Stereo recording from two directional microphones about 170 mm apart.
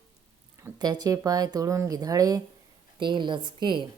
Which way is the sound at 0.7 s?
25° right (ahead or behind).